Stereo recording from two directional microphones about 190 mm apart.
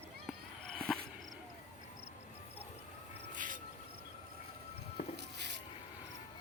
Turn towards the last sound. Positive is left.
turn(degrees=45)  # may be behind; listen again after turning